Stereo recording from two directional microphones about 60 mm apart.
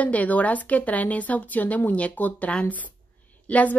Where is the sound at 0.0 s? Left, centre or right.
Left.